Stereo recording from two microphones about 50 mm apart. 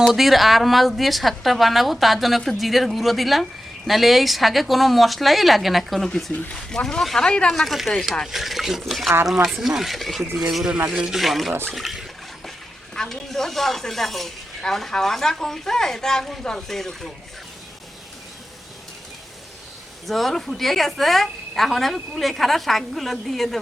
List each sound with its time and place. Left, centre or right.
0.1 s a woman's voice: centre
6.3 s speech: centre
7.5 s a woman's voice: centre
10.8 s speech: centre
11.2 s a woman's voice: centre
12.9 s speech: centre
20.1 s a woman's voice: centre